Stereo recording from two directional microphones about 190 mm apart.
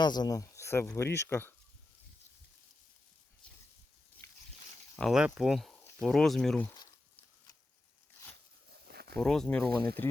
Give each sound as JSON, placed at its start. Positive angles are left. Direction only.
{"t": 0.0, "sound": "speech", "side_deg": 20}
{"t": 4.2, "sound": "a sound", "side_deg": 15}
{"t": 4.9, "sound": "speech", "side_deg": 0}
{"t": 8.9, "sound": "a sound", "side_deg": -55}
{"t": 9.2, "sound": "speech", "side_deg": 5}
{"t": 9.6, "sound": "speech", "side_deg": -55}